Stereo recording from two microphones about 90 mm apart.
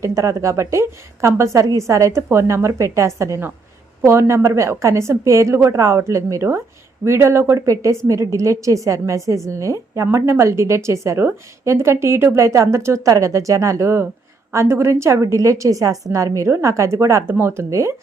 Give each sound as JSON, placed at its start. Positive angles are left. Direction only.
{"t": 0.0, "sound": "a woman's voice", "side_deg": -35}